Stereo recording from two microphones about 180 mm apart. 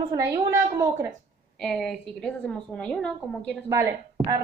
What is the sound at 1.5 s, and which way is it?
A woman's voice, centre (ahead or behind).